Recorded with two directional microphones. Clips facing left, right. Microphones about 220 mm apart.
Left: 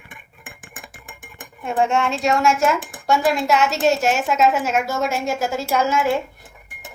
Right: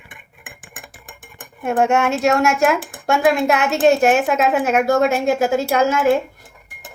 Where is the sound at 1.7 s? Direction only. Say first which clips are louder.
Right 3 dB; 65° right (ahead or behind).